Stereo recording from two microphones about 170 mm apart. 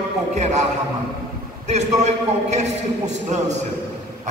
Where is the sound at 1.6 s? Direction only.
40° right (ahead or behind).